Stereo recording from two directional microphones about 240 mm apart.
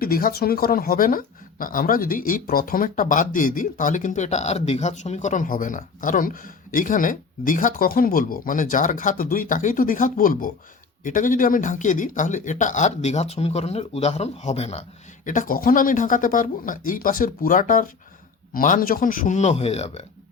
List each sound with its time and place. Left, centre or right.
0.0 s speech: left